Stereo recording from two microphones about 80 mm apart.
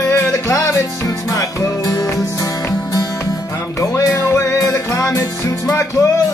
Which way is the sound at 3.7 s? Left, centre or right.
Left.